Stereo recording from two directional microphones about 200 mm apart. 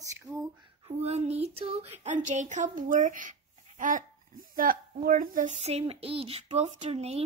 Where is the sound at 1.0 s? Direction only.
30° right (ahead or behind).